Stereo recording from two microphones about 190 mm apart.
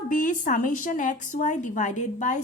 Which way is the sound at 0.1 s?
45° left (ahead or behind).